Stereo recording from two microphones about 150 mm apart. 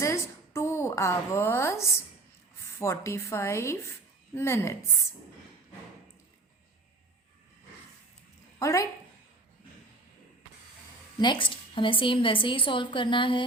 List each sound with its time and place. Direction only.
0.0 s a woman's voice: 20° left (ahead or behind)
8.5 s speech: 20° left (ahead or behind)
11.2 s a woman's voice: 30° left (ahead or behind)